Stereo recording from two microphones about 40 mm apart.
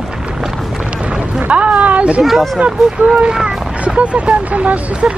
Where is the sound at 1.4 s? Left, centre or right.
Right.